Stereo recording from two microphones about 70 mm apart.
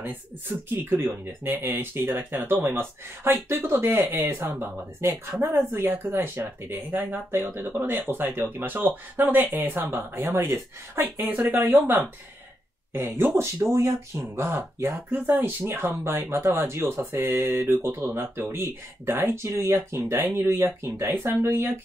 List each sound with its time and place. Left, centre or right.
0.5 s speech: right
11.2 s speech: right
13.4 s speech: right
15.0 s speech: right